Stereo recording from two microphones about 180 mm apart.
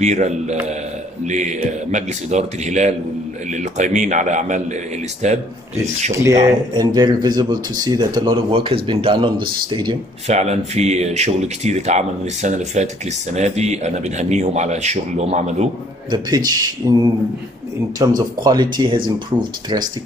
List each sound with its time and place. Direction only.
0.0 s speech: 40° right (ahead or behind)
6.1 s speech: 20° right (ahead or behind)
10.2 s speech: 40° right (ahead or behind)
16.1 s speech: 20° right (ahead or behind)
17.9 s speech: 20° right (ahead or behind)